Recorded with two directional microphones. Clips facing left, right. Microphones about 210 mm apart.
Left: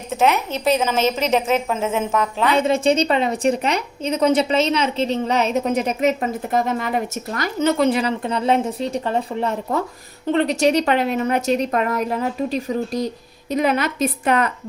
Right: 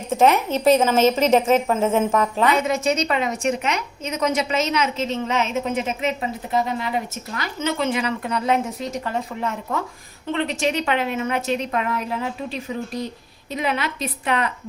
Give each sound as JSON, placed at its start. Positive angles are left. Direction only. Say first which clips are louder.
{"t": 0.5, "sound": "a woman's voice", "louder": "right 3 dB", "side_deg": -10}
{"t": 2.5, "sound": "a woman's voice", "louder": "left 3 dB", "side_deg": 30}